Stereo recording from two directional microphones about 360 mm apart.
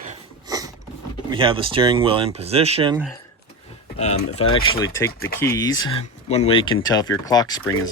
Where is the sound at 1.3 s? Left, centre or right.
Centre.